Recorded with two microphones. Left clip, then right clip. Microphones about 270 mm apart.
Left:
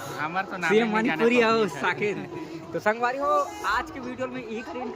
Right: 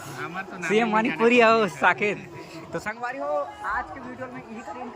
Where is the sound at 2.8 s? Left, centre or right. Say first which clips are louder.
Left 9 dB; left.